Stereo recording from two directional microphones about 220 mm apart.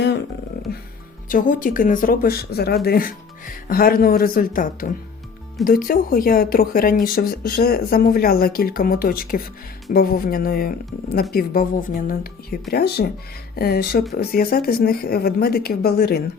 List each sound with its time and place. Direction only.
1.3 s a woman's voice: 35° left (ahead or behind)